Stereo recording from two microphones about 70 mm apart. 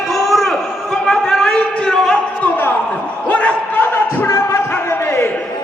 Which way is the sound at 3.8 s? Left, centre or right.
Left.